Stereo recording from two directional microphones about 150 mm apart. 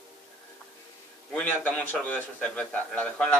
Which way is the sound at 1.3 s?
10° left (ahead or behind).